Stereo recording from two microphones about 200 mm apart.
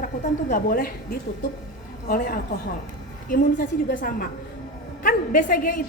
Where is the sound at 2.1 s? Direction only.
45° left (ahead or behind).